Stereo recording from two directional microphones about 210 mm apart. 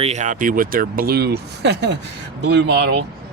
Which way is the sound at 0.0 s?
35° right (ahead or behind).